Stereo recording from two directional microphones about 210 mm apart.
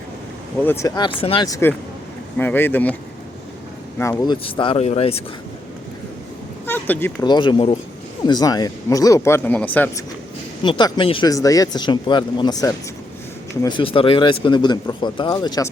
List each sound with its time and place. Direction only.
0.6 s speech: 10° left (ahead or behind)
3.9 s speech: 15° left (ahead or behind); by 5.2 s 30° left (ahead or behind)
6.7 s speech: 10° left (ahead or behind)
7.3 s speech: 20° left (ahead or behind)
10.6 s speech: 20° left (ahead or behind)